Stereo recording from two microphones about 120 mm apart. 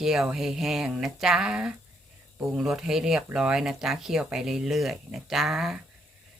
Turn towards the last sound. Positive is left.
turn(degrees=-5)  # may be behind; listen again after turning